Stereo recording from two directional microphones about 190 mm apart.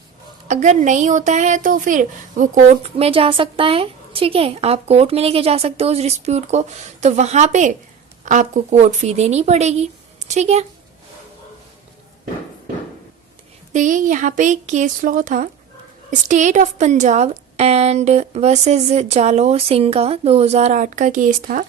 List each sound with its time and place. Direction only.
0.4 s a woman's voice: 40° right (ahead or behind)
13.7 s a woman's voice: 40° right (ahead or behind)